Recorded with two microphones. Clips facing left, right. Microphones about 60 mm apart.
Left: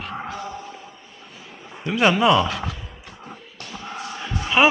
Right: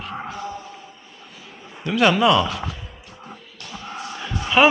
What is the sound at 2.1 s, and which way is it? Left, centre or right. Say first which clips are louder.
Speech: left 1 dB; centre.